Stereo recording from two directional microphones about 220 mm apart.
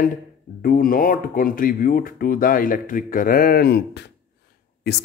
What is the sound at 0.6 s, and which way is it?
Speech, 40° left (ahead or behind).